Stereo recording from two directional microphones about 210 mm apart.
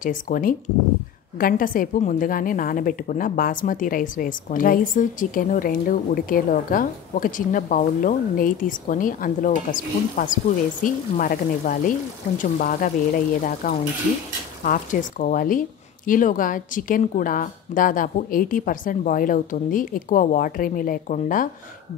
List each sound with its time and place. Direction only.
0.0 s a woman's voice: 40° left (ahead or behind)